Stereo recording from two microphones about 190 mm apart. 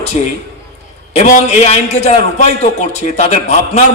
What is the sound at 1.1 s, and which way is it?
A man's voice, 35° left (ahead or behind).